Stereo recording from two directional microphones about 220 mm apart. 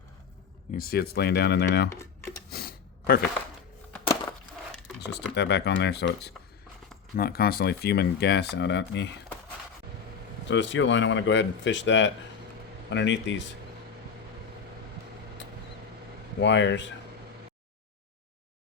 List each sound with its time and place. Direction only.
0.7 s speech: 45° left (ahead or behind)
1.9 s speech: 10° left (ahead or behind)
2.5 s a sound: 45° left (ahead or behind)
4.0 s a sound: 15° left (ahead or behind)
4.9 s speech: 50° left (ahead or behind)
10.5 s speech: 55° left (ahead or behind)
16.4 s speech: 55° left (ahead or behind)